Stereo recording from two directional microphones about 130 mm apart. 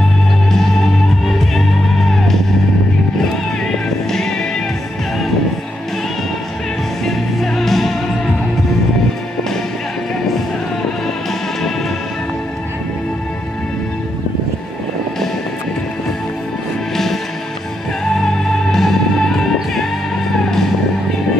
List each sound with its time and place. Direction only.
1.2 s music: centre (ahead or behind)
3.6 s music: 5° left (ahead or behind)
7.1 s music: centre (ahead or behind)
16.9 s music: centre (ahead or behind)